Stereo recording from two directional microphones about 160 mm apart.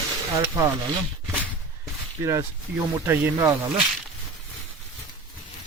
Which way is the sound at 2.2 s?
20° right (ahead or behind).